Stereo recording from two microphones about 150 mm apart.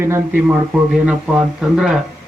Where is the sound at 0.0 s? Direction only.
15° right (ahead or behind).